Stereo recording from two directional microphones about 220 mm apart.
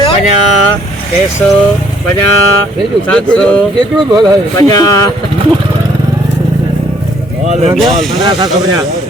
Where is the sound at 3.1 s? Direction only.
5° left (ahead or behind).